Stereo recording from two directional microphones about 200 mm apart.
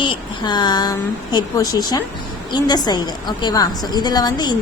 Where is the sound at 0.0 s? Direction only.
25° left (ahead or behind).